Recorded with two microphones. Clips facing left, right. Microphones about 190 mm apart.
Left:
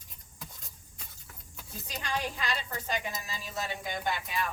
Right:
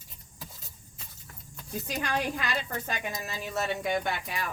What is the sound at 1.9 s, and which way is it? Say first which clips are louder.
A woman's voice: right 4 dB; 60° right (ahead or behind).